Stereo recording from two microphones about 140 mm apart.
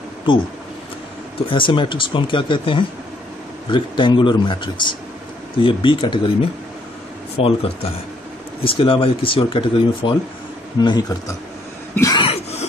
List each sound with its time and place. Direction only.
1.5 s speech: 35° left (ahead or behind)
7.3 s speech: 45° left (ahead or behind)
11.9 s cough: 20° left (ahead or behind)
12.2 s cough: 45° left (ahead or behind)